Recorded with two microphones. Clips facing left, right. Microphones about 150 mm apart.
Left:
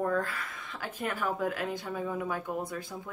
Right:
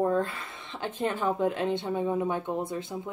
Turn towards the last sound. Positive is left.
turn(degrees=-20)  # may be behind; listen again after turning